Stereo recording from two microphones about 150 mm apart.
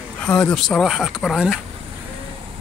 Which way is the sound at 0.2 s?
10° left (ahead or behind).